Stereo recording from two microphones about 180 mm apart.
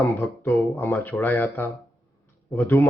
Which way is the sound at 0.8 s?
15° left (ahead or behind).